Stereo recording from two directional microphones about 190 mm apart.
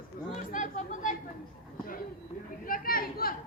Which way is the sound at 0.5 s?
40° left (ahead or behind).